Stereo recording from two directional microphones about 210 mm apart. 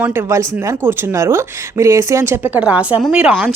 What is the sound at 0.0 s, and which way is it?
Speech, 10° right (ahead or behind).